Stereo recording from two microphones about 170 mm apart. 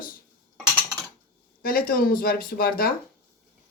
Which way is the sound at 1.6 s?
60° left (ahead or behind).